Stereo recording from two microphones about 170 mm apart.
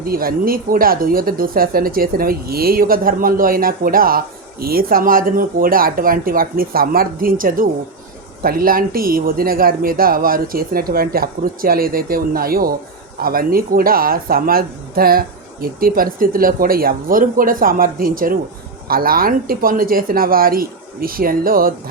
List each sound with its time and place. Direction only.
0.0 s speech: 60° right (ahead or behind)